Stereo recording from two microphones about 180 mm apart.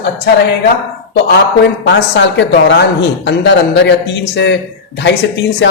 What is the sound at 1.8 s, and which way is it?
Speech, 75° left (ahead or behind).